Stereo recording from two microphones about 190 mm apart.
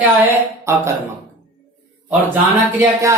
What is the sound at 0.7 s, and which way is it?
Speech, 15° right (ahead or behind).